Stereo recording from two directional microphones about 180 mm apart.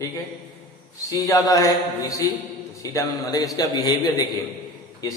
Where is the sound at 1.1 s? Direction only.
20° left (ahead or behind).